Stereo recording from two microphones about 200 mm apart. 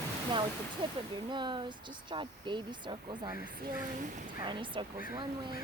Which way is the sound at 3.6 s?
45° right (ahead or behind).